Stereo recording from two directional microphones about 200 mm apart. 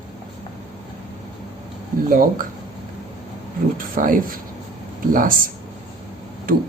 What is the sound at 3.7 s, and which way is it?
Speech, 45° right (ahead or behind).